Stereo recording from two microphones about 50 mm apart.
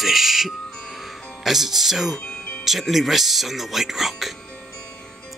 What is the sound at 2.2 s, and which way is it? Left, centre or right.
Music, left.